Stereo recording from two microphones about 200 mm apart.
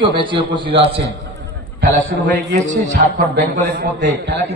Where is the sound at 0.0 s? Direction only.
25° right (ahead or behind).